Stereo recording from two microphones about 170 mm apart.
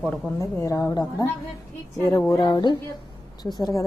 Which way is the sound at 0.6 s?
20° left (ahead or behind).